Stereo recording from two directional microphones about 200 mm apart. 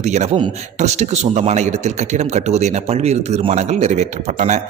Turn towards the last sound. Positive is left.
turn(degrees=-35)  # may be behind; listen again after turning